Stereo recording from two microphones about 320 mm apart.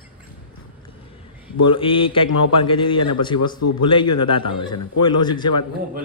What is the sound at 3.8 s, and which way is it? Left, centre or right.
A man's voice, centre.